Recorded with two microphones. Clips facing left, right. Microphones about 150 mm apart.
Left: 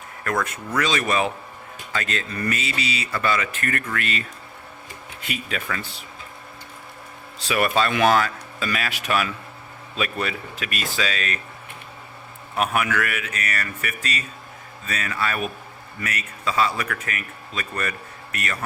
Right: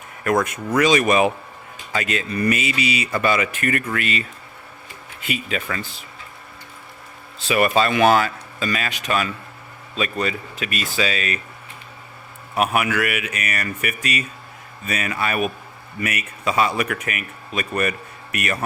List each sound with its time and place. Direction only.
0.3 s speech: 15° right (ahead or behind)
5.2 s speech: centre (ahead or behind)
7.3 s speech: centre (ahead or behind)
12.5 s speech: 10° right (ahead or behind)